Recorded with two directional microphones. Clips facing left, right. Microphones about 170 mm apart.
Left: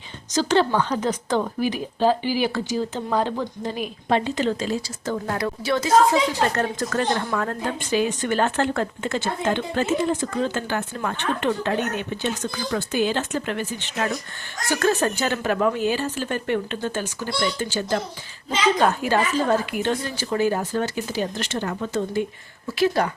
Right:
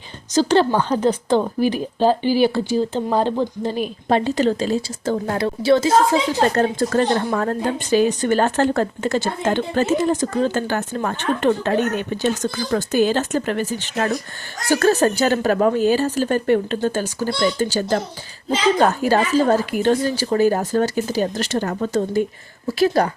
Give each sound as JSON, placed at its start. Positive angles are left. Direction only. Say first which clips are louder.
{"t": 0.3, "sound": "a woman's voice", "louder": "right 4 dB", "side_deg": -35}
{"t": 19.0, "sound": "a woman's voice", "louder": "right 5 dB", "side_deg": -40}